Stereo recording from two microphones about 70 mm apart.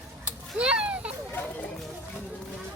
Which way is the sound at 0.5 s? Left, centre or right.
Centre.